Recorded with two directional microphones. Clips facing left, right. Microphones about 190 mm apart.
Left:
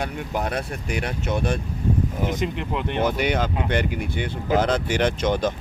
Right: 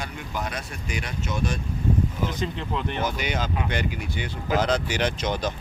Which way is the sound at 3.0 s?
60° left (ahead or behind).